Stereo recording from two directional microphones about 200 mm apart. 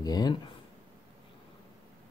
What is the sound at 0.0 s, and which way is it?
Speech, 20° left (ahead or behind).